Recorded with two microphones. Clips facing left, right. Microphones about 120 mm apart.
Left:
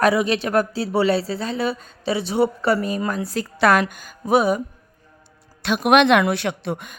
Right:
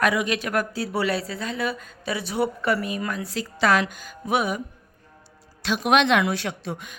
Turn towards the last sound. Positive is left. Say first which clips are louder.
# left 6 dB
turn(degrees=55)  # may be behind; listen again after turning